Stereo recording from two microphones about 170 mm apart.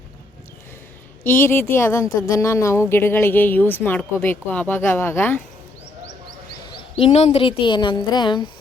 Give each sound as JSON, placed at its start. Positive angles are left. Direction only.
{"t": 1.2, "sound": "a woman's voice", "side_deg": 15}
{"t": 7.0, "sound": "a woman's voice", "side_deg": 35}